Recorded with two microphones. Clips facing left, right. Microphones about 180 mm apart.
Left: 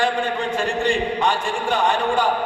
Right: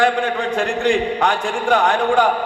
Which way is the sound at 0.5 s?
65° right (ahead or behind).